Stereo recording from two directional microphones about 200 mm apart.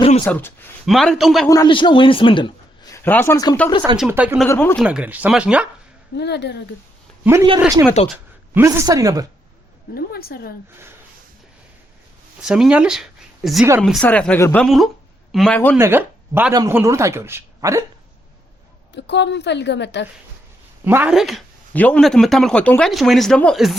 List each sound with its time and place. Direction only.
0.3 s speech: 10° left (ahead or behind)
1.5 s a man's voice: 20° left (ahead or behind)
2.9 s speech: 10° left (ahead or behind)
3.9 s a man's voice: 5° right (ahead or behind)
4.4 s speech: 10° left (ahead or behind)
4.9 s speech: 5° right (ahead or behind)
6.1 s a woman's voice: 55° left (ahead or behind)
8.0 s speech: 5° right (ahead or behind)
9.9 s a woman's voice: 50° left (ahead or behind)
12.4 s speech: 5° right (ahead or behind)
15.8 s a man's voice: 10° right (ahead or behind)
18.9 s a woman's voice: 60° left (ahead or behind)
20.8 s speech: 10° right (ahead or behind)